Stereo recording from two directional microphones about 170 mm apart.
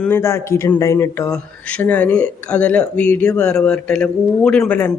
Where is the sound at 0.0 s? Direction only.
15° left (ahead or behind).